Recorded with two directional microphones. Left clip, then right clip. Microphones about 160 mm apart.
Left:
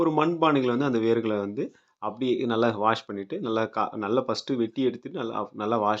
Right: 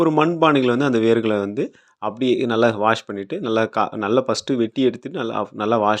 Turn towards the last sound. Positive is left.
turn(degrees=-25)  # may be behind; listen again after turning